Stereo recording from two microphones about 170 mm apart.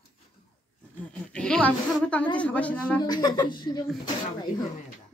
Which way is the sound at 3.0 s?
25° left (ahead or behind).